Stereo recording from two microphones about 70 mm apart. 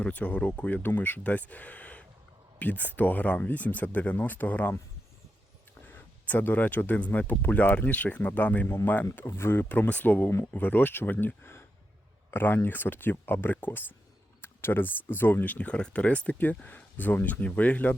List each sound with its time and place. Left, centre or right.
0.0 s speech: left
5.9 s speech: left